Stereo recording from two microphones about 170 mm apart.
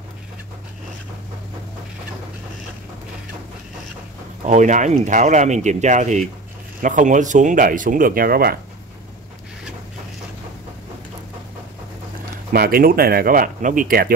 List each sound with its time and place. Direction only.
4.5 s speech: 45° right (ahead or behind); by 8.5 s 60° right (ahead or behind)
12.5 s speech: 60° right (ahead or behind)